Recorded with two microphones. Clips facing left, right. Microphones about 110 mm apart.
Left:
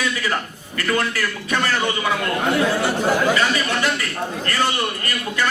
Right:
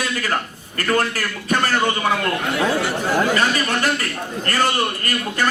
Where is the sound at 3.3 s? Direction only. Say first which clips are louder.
Right 1 dB; 45° right (ahead or behind).